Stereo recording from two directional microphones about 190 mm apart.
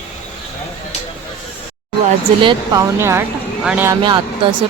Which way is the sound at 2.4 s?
20° right (ahead or behind).